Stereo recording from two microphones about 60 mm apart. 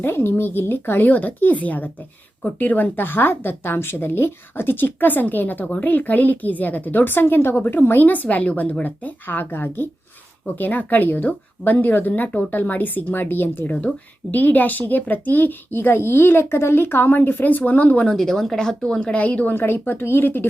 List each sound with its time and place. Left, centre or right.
0.0 s speech: left
18.1 s speech: centre
19.5 s speech: left